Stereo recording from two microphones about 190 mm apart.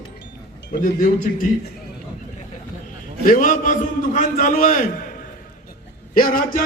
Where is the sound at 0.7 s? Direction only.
50° left (ahead or behind).